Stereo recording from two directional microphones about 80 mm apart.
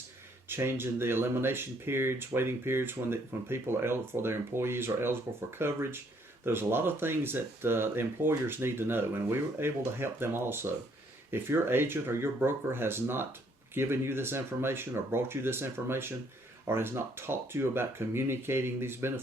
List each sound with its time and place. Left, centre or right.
0.4 s speech: right